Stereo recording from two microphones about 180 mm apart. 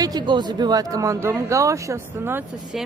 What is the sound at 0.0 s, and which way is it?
Speech, 25° right (ahead or behind).